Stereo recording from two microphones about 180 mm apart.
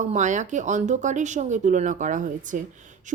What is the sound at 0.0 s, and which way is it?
A woman's voice, 45° right (ahead or behind).